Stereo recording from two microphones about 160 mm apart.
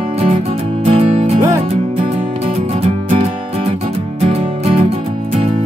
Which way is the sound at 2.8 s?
40° right (ahead or behind).